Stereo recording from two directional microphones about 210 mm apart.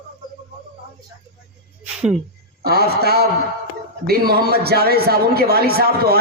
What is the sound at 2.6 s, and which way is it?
A man's voice, 50° right (ahead or behind).